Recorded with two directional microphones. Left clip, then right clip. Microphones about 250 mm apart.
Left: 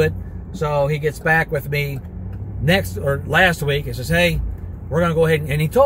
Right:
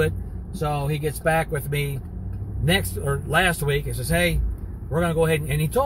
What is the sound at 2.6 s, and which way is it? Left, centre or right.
Speech, centre.